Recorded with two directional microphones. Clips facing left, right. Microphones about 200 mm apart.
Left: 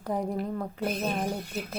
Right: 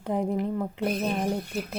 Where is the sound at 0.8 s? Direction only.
Centre (ahead or behind).